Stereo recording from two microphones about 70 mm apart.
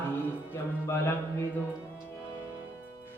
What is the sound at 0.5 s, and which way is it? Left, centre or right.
Music, left.